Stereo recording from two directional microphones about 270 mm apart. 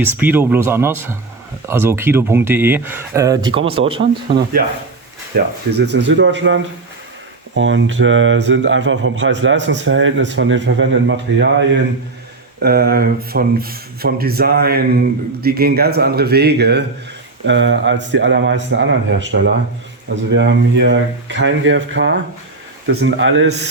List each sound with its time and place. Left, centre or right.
0.0 s speech: centre
4.3 s speech: right